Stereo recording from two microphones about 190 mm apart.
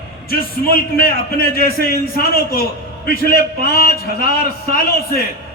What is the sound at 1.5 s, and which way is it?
A man's voice, 55° left (ahead or behind).